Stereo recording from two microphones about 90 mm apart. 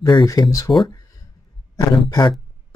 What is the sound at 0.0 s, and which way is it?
Speech, 55° left (ahead or behind).